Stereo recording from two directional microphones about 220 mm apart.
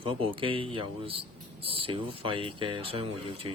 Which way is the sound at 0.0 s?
25° right (ahead or behind).